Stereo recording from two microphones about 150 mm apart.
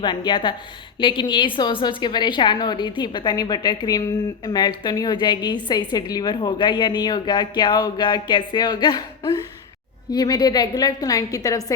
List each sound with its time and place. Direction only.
0.0 s a woman's voice: 30° left (ahead or behind)